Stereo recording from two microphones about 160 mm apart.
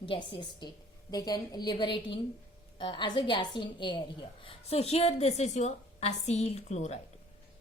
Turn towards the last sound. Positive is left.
turn(degrees=45)  # may be behind; listen again after turning